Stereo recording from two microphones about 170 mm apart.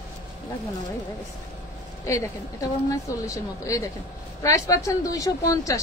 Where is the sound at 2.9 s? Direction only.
20° left (ahead or behind).